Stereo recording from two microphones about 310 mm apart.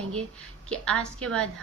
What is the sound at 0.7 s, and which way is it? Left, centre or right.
Speech, centre.